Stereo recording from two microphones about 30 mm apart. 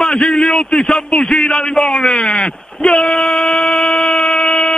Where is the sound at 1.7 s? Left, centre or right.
Left.